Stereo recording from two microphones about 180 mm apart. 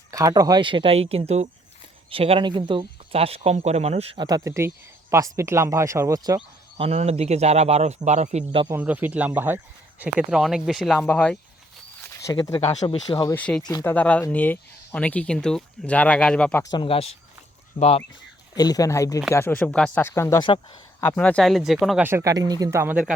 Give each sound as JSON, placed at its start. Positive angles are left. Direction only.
{"t": 0.1, "sound": "speech", "side_deg": -20}
{"t": 6.8, "sound": "speech", "side_deg": -35}
{"t": 8.7, "sound": "speech", "side_deg": -10}
{"t": 12.2, "sound": "speech", "side_deg": 20}
{"t": 13.3, "sound": "speech", "side_deg": 5}
{"t": 13.6, "sound": "speech", "side_deg": 20}
{"t": 13.8, "sound": "speech", "side_deg": 10}
{"t": 16.7, "sound": "speech", "side_deg": 30}
{"t": 18.5, "sound": "speech", "side_deg": 20}
{"t": 21.2, "sound": "speech", "side_deg": 5}
{"t": 22.0, "sound": "speech", "side_deg": -15}